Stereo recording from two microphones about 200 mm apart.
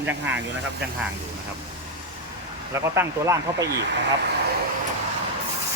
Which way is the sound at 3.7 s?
60° right (ahead or behind).